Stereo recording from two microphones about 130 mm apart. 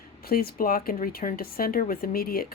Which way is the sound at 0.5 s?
90° left.